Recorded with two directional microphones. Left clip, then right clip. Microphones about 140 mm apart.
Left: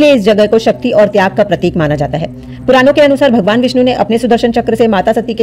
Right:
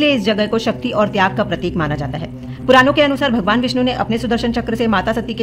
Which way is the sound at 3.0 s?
40° left (ahead or behind).